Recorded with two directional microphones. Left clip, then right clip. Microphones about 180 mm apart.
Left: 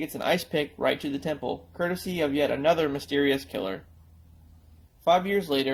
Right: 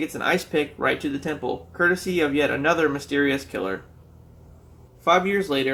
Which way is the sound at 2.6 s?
25° left (ahead or behind).